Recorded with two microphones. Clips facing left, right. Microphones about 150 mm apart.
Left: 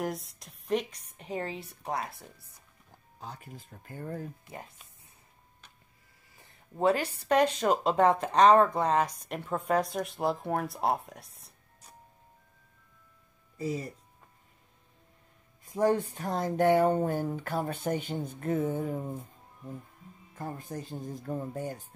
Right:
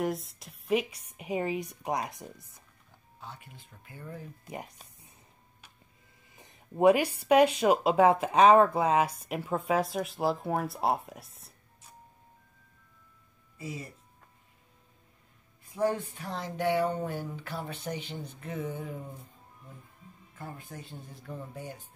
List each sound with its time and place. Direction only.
0.0 s speech: centre (ahead or behind); by 2.4 s 15° right (ahead or behind)
3.2 s speech: 40° left (ahead or behind)
4.5 s speech: 15° right (ahead or behind)
6.3 s speech: 20° right (ahead or behind); by 11.5 s centre (ahead or behind)
13.6 s speech: 40° left (ahead or behind)
15.6 s speech: 40° left (ahead or behind)
20.3 s speech: 40° left (ahead or behind)